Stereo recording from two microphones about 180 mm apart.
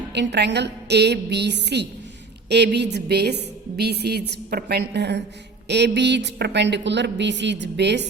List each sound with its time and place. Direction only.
0.1 s a woman's voice: 70° right (ahead or behind)